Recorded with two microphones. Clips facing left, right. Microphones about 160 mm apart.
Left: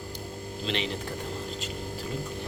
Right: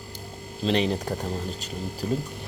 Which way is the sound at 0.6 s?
40° right (ahead or behind).